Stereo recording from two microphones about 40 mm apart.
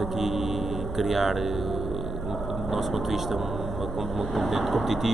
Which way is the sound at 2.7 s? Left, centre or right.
Centre.